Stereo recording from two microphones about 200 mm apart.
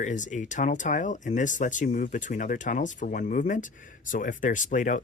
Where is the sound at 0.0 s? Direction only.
40° left (ahead or behind).